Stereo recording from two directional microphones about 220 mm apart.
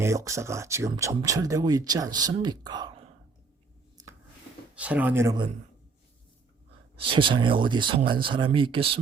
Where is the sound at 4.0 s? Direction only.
15° right (ahead or behind).